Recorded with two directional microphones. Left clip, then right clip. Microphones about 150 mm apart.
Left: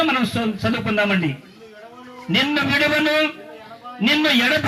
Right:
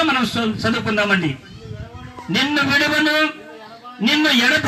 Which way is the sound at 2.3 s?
15° left (ahead or behind).